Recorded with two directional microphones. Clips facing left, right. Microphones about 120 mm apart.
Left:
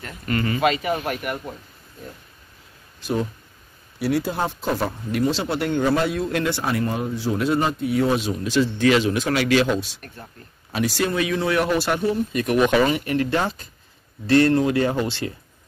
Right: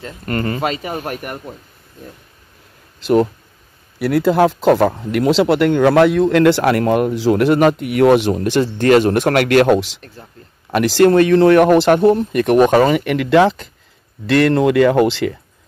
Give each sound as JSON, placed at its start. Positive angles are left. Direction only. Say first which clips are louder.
{"t": 0.2, "sound": "speech", "louder": "right 1 dB", "side_deg": -45}
{"t": 3.0, "sound": "speech", "louder": "right 11 dB", "side_deg": -75}
{"t": 8.7, "sound": "speech", "louder": "right 9 dB", "side_deg": -55}
{"t": 11.1, "sound": "speech", "louder": "right 11 dB", "side_deg": -55}
{"t": 12.6, "sound": "speech", "louder": "right 3 dB", "side_deg": -45}
{"t": 12.9, "sound": "speech", "louder": "right 9 dB", "side_deg": -75}